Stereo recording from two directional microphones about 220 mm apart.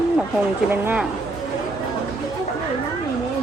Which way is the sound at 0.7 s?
10° right (ahead or behind).